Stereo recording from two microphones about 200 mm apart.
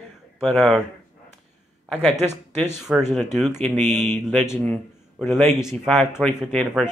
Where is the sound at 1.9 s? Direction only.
Centre (ahead or behind).